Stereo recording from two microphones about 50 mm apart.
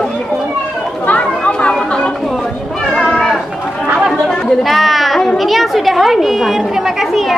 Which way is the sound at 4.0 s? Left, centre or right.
Centre.